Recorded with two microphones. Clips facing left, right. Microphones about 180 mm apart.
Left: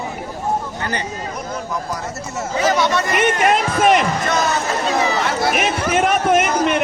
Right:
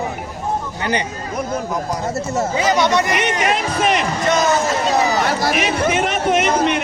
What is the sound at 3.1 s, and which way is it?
Speech, 50° left (ahead or behind).